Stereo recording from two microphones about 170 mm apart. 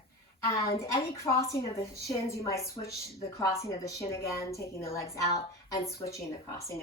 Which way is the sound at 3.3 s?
20° left (ahead or behind).